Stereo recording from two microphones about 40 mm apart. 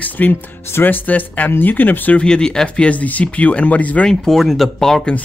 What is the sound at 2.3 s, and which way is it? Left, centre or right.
Speech, centre.